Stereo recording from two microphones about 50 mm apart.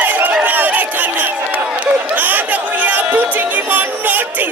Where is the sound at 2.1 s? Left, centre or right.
Right.